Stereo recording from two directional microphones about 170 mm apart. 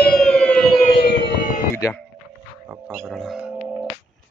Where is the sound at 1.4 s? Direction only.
50° left (ahead or behind).